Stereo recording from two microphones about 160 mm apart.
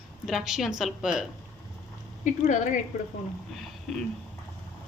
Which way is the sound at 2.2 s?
50° left (ahead or behind).